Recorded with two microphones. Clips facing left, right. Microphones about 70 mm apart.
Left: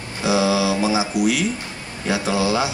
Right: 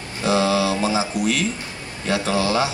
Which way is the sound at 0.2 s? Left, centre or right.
Centre.